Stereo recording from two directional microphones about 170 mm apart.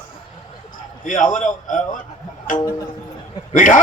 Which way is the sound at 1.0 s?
50° left (ahead or behind).